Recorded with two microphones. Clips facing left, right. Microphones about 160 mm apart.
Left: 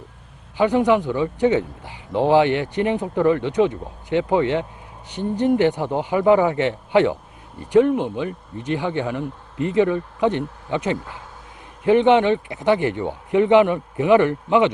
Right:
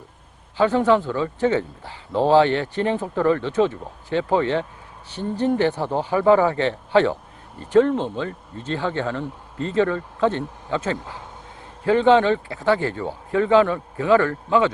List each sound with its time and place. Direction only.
0.5 s a man's voice: 15° left (ahead or behind)